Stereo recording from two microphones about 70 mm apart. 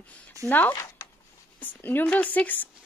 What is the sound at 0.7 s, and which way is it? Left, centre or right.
Speech, left.